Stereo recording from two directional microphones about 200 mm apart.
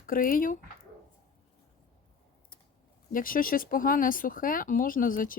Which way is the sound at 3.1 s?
45° left (ahead or behind).